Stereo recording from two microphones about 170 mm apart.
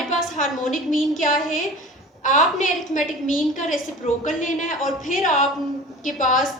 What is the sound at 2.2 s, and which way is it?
A man's voice, 45° left (ahead or behind).